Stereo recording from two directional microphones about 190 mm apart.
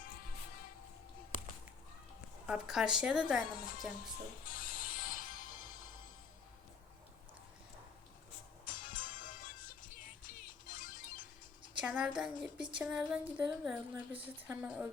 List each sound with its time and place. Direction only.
2.5 s a woman's voice: 5° right (ahead or behind)
4.4 s music: 50° left (ahead or behind)
8.6 s music: 45° left (ahead or behind)
11.8 s speech: 5° right (ahead or behind)